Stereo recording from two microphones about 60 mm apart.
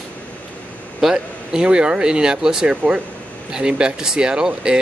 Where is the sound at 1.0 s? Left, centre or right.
Centre.